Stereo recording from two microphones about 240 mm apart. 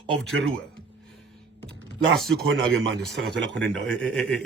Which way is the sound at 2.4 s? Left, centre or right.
Right.